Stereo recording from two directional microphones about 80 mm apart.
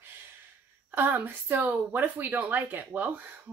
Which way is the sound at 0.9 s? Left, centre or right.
Right.